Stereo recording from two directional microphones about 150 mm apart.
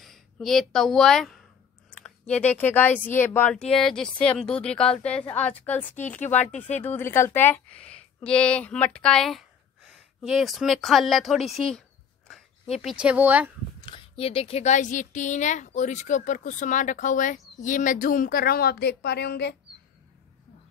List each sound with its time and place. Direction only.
0.0 s speech: centre (ahead or behind)
6.4 s speech: 50° left (ahead or behind)
6.8 s a woman's voice: 15° left (ahead or behind)
12.3 s a sound: 5° left (ahead or behind)
12.8 s speech: 5° right (ahead or behind)
13.7 s speech: 35° left (ahead or behind); by 19.4 s 90° left